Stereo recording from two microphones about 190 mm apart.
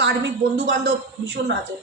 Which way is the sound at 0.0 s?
60° right (ahead or behind).